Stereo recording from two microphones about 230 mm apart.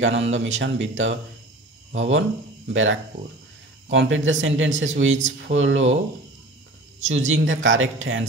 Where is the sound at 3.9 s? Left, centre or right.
Right.